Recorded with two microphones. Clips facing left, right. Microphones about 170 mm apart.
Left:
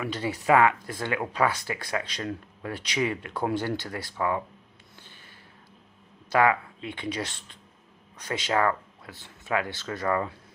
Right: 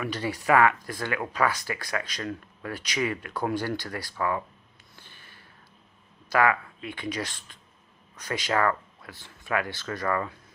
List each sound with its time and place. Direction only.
0.0 s speech: 20° left (ahead or behind)
4.9 s a sound: 20° left (ahead or behind)
6.3 s speech: 25° left (ahead or behind)